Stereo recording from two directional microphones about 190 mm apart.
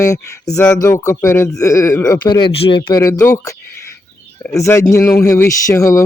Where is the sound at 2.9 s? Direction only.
15° left (ahead or behind).